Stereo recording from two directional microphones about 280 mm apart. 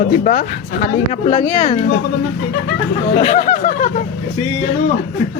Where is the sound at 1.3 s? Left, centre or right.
Left.